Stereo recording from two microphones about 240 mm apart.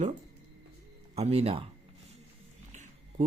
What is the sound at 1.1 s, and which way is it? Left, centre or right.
Speech, right.